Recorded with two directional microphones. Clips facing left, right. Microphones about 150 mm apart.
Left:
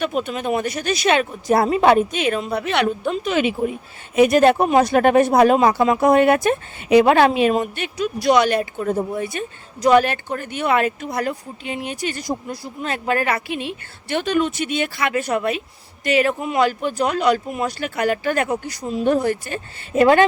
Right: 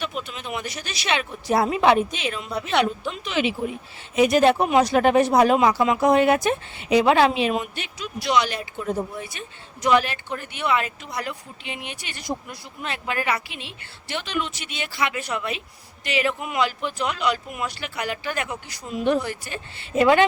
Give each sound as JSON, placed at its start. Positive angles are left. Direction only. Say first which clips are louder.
{"t": 0.0, "sound": "a woman's voice", "louder": "left 9 dB", "side_deg": 50}
{"t": 2.8, "sound": "speech", "louder": "left 7 dB", "side_deg": 50}
{"t": 5.5, "sound": "speech", "louder": "left 3 dB", "side_deg": 45}